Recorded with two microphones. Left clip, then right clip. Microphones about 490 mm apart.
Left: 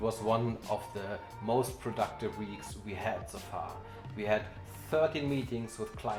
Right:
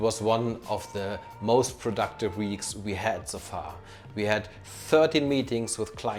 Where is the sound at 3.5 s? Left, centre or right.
Right.